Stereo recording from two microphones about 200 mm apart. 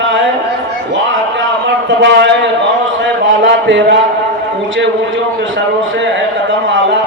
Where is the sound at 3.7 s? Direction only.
60° right (ahead or behind).